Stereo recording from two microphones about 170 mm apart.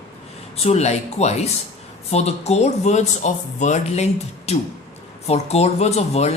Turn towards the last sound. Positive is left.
turn(degrees=40)  # may be behind; listen again after turning